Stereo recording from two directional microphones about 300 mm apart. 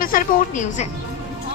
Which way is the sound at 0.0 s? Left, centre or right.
Left.